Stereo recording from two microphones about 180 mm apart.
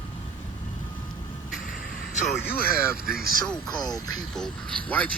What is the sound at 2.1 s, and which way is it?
Speech, 40° left (ahead or behind).